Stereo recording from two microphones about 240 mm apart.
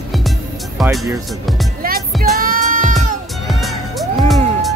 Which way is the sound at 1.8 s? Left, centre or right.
Right.